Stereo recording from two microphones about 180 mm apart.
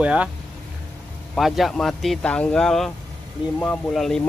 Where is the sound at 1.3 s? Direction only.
Centre (ahead or behind).